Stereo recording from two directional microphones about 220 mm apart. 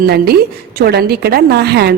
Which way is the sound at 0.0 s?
45° right (ahead or behind).